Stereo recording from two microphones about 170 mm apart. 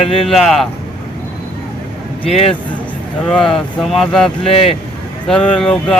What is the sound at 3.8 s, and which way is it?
Speech, centre (ahead or behind).